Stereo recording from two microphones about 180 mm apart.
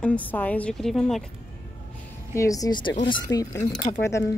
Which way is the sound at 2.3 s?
20° left (ahead or behind).